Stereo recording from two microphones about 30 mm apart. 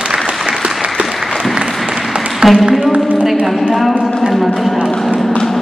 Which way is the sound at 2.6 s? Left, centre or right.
Centre.